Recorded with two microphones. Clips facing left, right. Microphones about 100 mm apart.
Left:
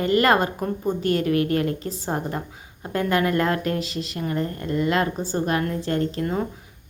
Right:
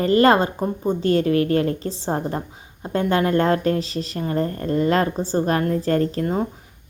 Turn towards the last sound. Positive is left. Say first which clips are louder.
# right 2 dB
turn(degrees=-30)  # may be behind; listen again after turning